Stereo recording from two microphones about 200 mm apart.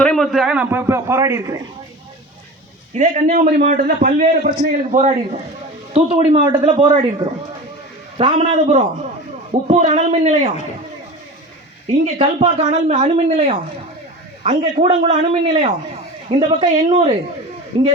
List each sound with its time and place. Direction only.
0.0 s a man's voice: 5° left (ahead or behind); by 1.6 s 15° right (ahead or behind)
2.9 s a man's voice: 35° right (ahead or behind)
8.2 s a man's voice: 30° right (ahead or behind)
12.0 s a man's voice: 35° right (ahead or behind)